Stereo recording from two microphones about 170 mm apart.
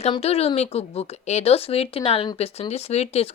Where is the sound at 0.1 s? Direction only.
35° left (ahead or behind).